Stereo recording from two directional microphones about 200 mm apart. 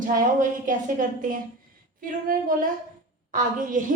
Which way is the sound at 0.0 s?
40° right (ahead or behind).